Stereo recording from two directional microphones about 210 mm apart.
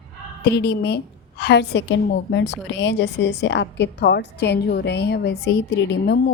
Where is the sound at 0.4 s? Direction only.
50° left (ahead or behind).